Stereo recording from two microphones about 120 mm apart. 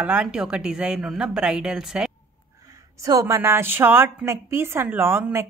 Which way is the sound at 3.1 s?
25° right (ahead or behind).